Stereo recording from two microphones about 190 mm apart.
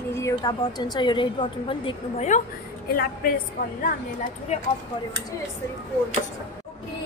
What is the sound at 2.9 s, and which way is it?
Speech, 50° left (ahead or behind).